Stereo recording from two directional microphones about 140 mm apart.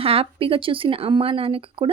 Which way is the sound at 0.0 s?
45° right (ahead or behind).